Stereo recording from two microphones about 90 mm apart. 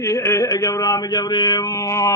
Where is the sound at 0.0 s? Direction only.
30° left (ahead or behind).